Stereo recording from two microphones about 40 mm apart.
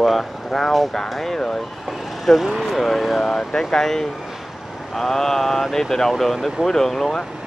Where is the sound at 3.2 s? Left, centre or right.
Centre.